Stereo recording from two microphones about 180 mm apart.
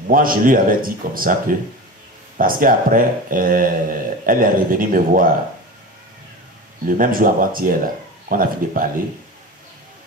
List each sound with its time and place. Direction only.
0.1 s speech: 50° right (ahead or behind)
7.0 s speech: 50° right (ahead or behind)